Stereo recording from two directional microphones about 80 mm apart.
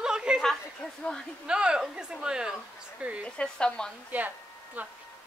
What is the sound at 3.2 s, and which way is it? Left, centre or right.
Speech, centre.